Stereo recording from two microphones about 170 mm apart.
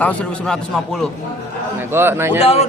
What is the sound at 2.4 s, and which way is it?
Speech, 35° left (ahead or behind).